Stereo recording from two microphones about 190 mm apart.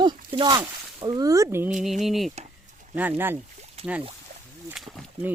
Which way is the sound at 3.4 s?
35° right (ahead or behind).